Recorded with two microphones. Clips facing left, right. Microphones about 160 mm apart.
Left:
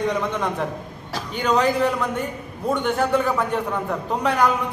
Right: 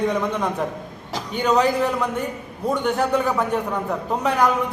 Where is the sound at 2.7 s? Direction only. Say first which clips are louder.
Even; centre (ahead or behind).